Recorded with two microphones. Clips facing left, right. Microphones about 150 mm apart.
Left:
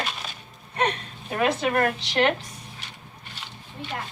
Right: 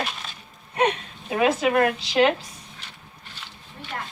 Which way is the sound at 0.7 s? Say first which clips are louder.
Right 3 dB; 10° right (ahead or behind).